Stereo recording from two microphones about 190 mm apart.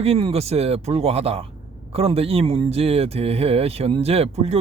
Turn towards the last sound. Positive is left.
turn(degrees=-30)  # may be behind; listen again after turning